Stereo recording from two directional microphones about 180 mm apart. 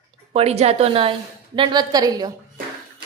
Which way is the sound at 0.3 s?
35° right (ahead or behind).